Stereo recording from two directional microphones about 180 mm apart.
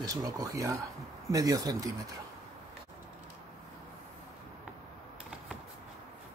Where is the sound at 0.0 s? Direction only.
20° right (ahead or behind).